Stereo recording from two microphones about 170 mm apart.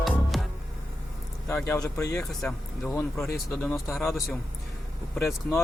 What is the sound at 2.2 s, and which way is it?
Speech, centre (ahead or behind).